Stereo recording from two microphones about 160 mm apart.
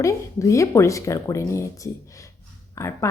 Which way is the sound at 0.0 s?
20° left (ahead or behind).